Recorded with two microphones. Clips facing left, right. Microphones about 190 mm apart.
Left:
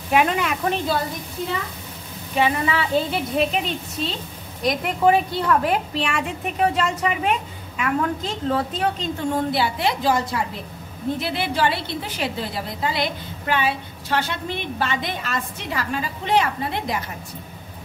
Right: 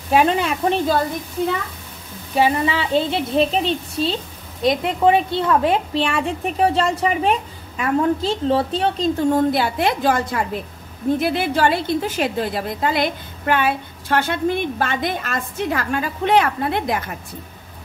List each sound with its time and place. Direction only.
0.1 s a woman's voice: 30° right (ahead or behind)
2.3 s a woman's voice: 30° right (ahead or behind); by 17.0 s 55° right (ahead or behind)